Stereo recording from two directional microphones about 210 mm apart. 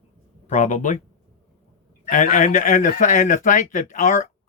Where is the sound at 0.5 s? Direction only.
35° left (ahead or behind).